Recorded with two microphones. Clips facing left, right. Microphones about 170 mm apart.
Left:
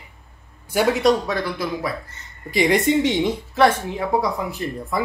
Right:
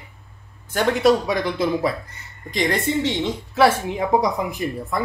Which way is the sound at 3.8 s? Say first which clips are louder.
Right 2 dB; 20° right (ahead or behind).